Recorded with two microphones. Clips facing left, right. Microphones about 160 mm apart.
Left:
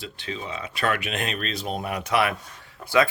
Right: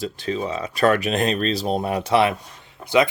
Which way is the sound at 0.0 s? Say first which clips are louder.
Right 9 dB; 40° right (ahead or behind).